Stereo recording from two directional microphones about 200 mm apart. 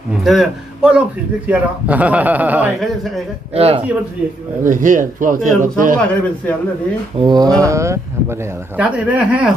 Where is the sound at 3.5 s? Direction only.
30° right (ahead or behind).